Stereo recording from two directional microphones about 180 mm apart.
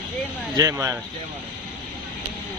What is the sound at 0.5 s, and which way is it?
Speech, 15° right (ahead or behind).